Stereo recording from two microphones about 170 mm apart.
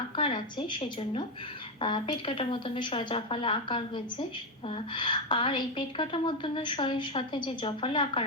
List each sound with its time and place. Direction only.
0.2 s a woman's voice: 30° left (ahead or behind)